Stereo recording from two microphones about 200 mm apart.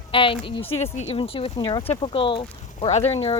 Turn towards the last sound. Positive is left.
turn(degrees=30)  # may be behind; listen again after turning